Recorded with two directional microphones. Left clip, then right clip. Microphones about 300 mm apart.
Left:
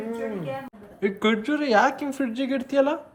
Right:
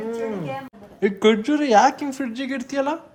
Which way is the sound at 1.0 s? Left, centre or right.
Centre.